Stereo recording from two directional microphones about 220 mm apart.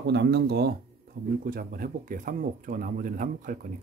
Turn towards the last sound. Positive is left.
turn(degrees=-35)  # may be behind; listen again after turning